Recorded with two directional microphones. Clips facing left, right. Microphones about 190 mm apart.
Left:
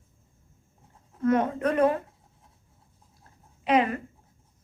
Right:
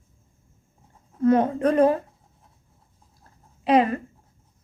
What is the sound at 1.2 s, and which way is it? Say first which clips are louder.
Speech: right 5 dB; 30° right (ahead or behind).